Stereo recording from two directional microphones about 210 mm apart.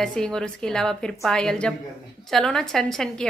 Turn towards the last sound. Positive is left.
turn(degrees=0)  # may be behind; listen again after turning